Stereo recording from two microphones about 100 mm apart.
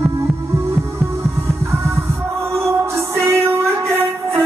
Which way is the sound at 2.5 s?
30° right (ahead or behind).